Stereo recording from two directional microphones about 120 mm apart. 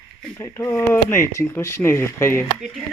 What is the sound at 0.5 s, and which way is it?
Speech, 20° left (ahead or behind).